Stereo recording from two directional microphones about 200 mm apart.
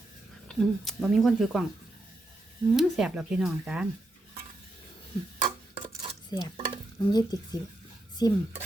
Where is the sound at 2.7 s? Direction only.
Centre (ahead or behind).